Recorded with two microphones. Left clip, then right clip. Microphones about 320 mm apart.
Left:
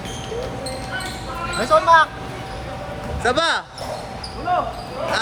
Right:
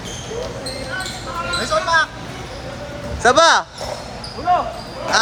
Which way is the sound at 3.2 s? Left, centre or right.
Centre.